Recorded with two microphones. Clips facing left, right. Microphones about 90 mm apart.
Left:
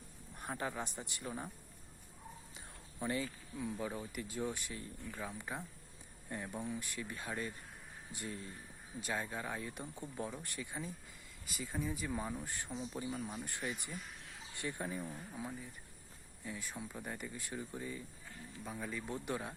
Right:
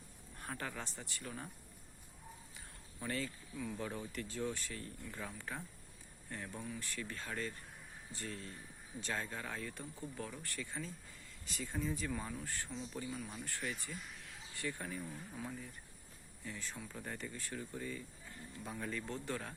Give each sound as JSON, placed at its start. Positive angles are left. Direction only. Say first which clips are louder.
{"t": 0.3, "sound": "speech", "louder": "left 4 dB", "side_deg": 20}
{"t": 3.0, "sound": "speech", "louder": "left 3 dB", "side_deg": 15}
{"t": 18.6, "sound": "speech", "louder": "even", "side_deg": 5}